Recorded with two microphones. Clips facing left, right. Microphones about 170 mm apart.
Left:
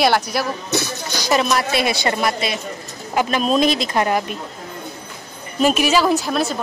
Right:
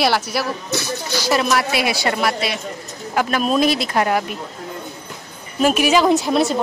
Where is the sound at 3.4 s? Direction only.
10° right (ahead or behind).